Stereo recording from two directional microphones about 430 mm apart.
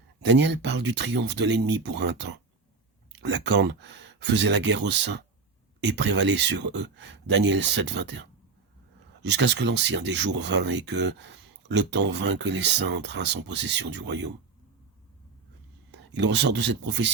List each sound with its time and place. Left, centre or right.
0.3 s speech: right
9.2 s speech: right
15.9 s speech: right